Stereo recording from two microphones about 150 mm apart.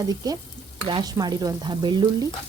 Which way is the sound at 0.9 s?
30° right (ahead or behind).